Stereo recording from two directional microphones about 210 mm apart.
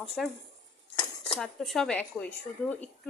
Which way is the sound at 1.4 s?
Centre (ahead or behind).